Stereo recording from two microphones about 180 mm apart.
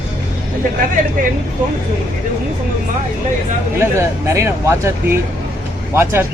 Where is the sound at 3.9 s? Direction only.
15° right (ahead or behind).